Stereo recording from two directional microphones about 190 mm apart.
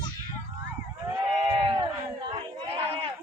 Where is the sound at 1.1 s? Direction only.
20° right (ahead or behind).